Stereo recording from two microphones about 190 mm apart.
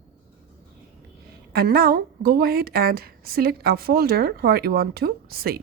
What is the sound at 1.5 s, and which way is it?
A woman's voice, 55° right (ahead or behind).